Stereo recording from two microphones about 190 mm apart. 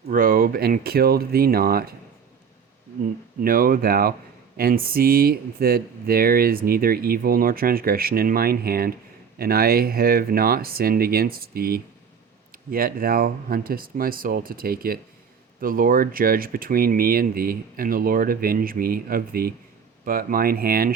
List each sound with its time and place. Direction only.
0.1 s speech: 50° right (ahead or behind)
3.4 s speech: 50° right (ahead or behind)